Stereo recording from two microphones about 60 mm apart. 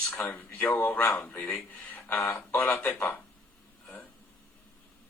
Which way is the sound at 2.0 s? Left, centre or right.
Left.